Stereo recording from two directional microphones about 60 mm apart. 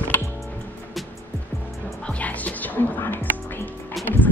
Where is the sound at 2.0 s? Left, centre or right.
Left.